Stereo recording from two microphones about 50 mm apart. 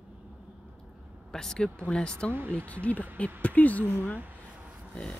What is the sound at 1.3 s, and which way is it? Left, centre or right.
Speech, centre.